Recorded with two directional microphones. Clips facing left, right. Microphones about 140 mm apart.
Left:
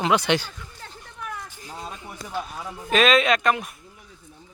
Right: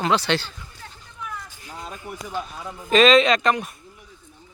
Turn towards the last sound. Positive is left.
turn(degrees=0)  # may be behind; listen again after turning